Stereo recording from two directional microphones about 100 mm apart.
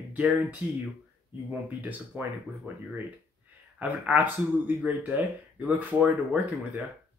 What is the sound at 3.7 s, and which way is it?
Speech, 15° right (ahead or behind).